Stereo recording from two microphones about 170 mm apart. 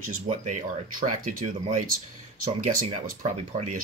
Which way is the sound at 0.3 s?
45° right (ahead or behind).